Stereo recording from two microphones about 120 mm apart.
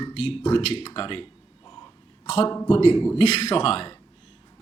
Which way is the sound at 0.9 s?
45° left (ahead or behind).